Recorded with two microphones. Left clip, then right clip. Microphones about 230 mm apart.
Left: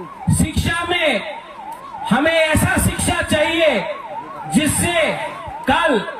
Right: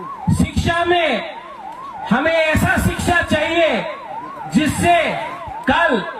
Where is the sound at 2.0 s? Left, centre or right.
Left.